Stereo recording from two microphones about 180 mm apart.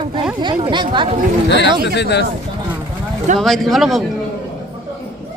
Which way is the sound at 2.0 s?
70° left (ahead or behind).